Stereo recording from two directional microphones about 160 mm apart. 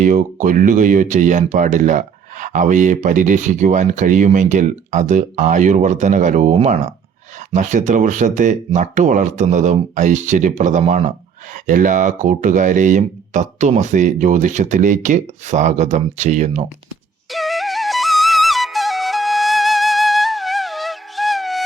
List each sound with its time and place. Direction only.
0.0 s speech: 50° right (ahead or behind)
17.3 s flute: centre (ahead or behind)